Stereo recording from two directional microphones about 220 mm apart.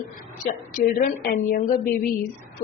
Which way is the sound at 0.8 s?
40° left (ahead or behind).